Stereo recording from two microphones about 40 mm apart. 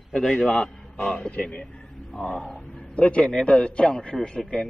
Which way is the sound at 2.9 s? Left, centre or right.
Left.